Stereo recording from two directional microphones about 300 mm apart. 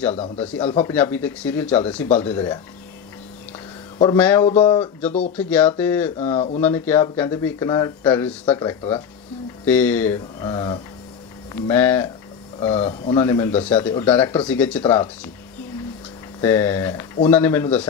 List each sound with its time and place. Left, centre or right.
0.7 s speech: centre
0.9 s speech: centre
4.0 s speech: centre
4.5 s speech: centre
5.3 s speech: centre
6.3 s speech: centre
6.6 s speech: centre
12.5 s speech: centre
16.3 s speech: centre